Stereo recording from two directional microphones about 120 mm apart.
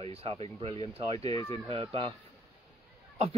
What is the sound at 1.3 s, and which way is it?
Speech, 35° left (ahead or behind).